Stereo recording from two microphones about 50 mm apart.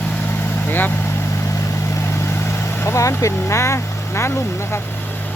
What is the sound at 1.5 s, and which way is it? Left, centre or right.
Vehicle, left.